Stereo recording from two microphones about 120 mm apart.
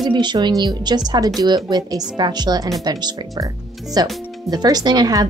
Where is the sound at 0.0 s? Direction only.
40° right (ahead or behind).